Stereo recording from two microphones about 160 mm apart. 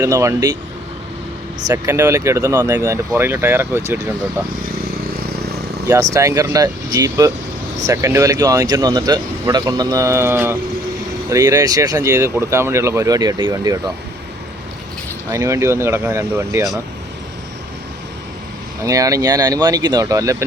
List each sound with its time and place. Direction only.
0.0 s speech: 20° right (ahead or behind)
1.6 s speech: 20° right (ahead or behind)
5.9 s speech: 20° right (ahead or behind)
15.3 s speech: 20° right (ahead or behind)
18.8 s speech: 20° right (ahead or behind)